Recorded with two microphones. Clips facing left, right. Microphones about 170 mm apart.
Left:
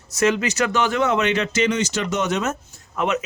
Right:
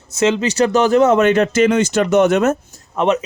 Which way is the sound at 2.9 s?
35° right (ahead or behind).